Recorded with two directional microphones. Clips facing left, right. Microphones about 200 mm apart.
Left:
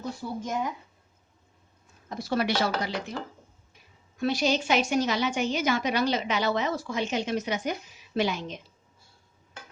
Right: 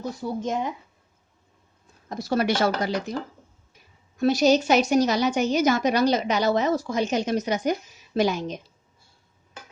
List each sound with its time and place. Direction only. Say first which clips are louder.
0.2 s speech: right 5 dB; 25° right (ahead or behind)
2.0 s speech: right 4 dB; 40° right (ahead or behind)
4.2 s a woman's voice: right 7 dB; 40° right (ahead or behind)